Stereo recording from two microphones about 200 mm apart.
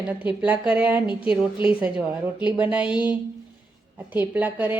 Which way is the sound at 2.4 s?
5° right (ahead or behind).